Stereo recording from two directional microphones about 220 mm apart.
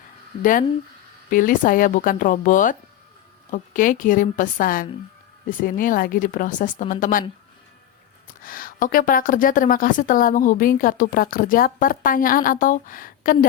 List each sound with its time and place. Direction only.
1.3 s a woman's voice: 40° left (ahead or behind)
8.4 s a woman's voice: 40° left (ahead or behind)